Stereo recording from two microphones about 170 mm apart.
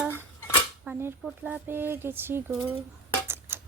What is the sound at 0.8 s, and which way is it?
Speech, 10° right (ahead or behind).